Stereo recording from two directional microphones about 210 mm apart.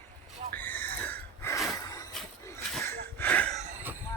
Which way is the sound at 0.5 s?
10° left (ahead or behind).